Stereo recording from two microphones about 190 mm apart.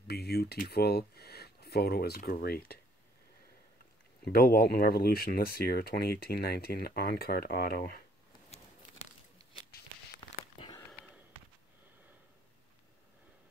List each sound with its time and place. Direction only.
0.0 s speech: 55° left (ahead or behind)
4.2 s speech: 50° left (ahead or behind)
10.2 s a sound: 25° left (ahead or behind)